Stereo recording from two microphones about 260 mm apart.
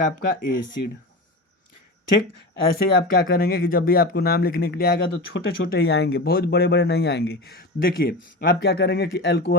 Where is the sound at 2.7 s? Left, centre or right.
Left.